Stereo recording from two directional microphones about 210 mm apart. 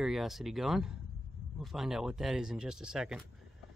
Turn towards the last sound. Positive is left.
turn(degrees=0)  # may be behind; listen again after turning